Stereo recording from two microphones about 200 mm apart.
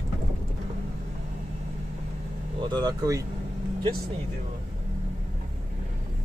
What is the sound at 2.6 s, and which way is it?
Speech, 20° right (ahead or behind).